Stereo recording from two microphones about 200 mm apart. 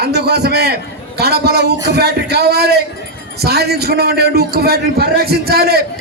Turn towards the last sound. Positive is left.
turn(degrees=-50)  # may be behind; listen again after turning